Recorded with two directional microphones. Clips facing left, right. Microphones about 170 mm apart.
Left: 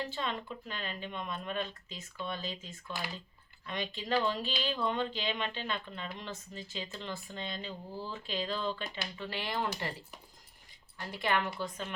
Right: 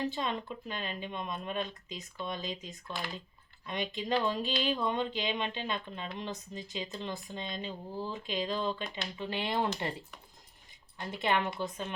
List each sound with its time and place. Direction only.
0.0 s speech: 15° right (ahead or behind)
10.9 s speech: 20° right (ahead or behind)